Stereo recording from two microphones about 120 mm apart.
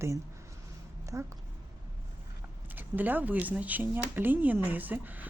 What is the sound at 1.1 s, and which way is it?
Speech, 20° right (ahead or behind).